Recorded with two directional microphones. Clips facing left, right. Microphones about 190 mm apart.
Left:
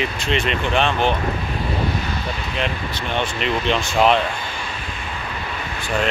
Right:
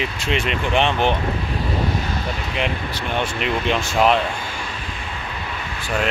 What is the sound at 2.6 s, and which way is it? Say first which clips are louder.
Speech: even; 10° right (ahead or behind).